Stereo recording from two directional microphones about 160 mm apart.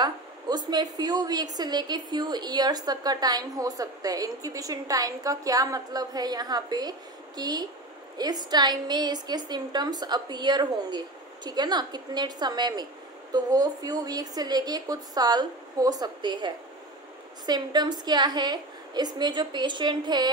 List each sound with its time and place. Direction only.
0.0 s a woman's voice: 25° right (ahead or behind)